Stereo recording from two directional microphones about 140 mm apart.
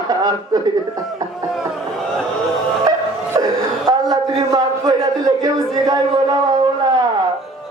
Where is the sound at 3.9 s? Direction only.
25° right (ahead or behind).